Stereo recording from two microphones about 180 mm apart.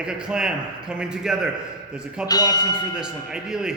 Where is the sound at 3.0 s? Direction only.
5° right (ahead or behind).